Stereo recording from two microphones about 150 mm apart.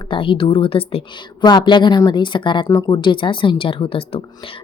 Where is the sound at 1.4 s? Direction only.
30° left (ahead or behind).